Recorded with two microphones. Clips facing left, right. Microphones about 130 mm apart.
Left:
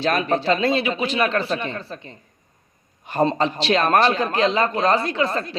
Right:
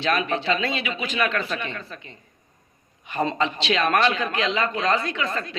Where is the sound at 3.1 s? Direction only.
35° left (ahead or behind).